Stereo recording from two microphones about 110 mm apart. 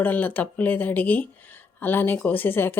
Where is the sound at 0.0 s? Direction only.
15° left (ahead or behind).